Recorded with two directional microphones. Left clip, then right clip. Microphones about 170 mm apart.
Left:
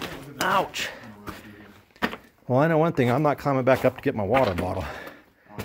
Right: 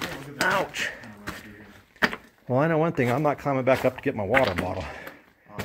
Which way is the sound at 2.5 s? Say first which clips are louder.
Left 2 dB; 20° left (ahead or behind).